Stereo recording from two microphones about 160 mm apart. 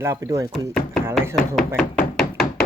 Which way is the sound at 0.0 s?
20° right (ahead or behind).